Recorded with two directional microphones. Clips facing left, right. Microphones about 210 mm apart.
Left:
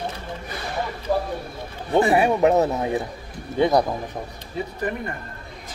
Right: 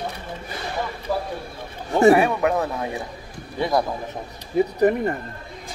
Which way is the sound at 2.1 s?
25° left (ahead or behind).